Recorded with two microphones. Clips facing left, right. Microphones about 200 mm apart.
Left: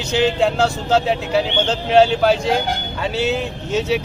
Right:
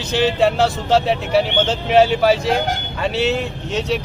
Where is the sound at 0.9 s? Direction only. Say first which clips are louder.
Right 1 dB; centre (ahead or behind).